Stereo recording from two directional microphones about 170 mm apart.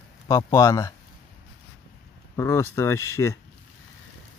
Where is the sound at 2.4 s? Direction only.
15° left (ahead or behind).